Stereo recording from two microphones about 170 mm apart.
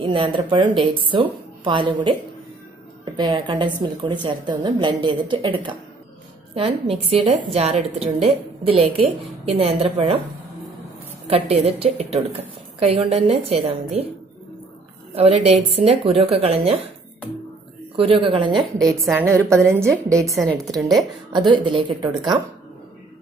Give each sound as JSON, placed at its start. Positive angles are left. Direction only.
{"t": 0.0, "sound": "a woman's voice", "side_deg": -30}
{"t": 3.2, "sound": "a woman's voice", "side_deg": -30}
{"t": 11.2, "sound": "a woman's voice", "side_deg": -35}
{"t": 15.1, "sound": "a woman's voice", "side_deg": -35}
{"t": 17.9, "sound": "a woman's voice", "side_deg": -30}
{"t": 18.8, "sound": "a woman's voice", "side_deg": 0}
{"t": 19.1, "sound": "a woman's voice", "side_deg": -15}
{"t": 20.3, "sound": "a woman's voice", "side_deg": 0}
{"t": 21.0, "sound": "a woman's voice", "side_deg": -25}